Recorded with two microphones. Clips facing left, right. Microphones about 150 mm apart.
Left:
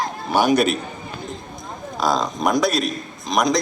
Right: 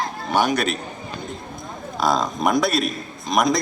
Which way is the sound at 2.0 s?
Centre (ahead or behind).